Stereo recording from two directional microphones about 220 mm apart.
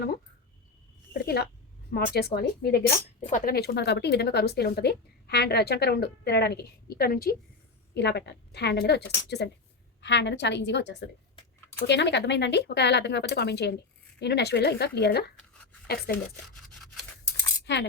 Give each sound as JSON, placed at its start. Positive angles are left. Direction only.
{"t": 1.1, "sound": "a sound", "side_deg": 45}
{"t": 1.9, "sound": "speech", "side_deg": 45}
{"t": 17.7, "sound": "speech", "side_deg": 55}